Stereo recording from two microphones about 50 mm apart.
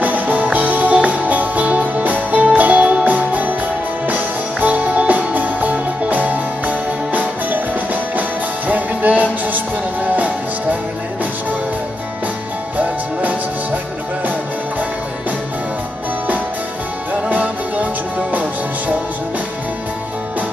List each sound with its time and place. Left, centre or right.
0.0 s music: right
12.7 s music: right
18.3 s music: right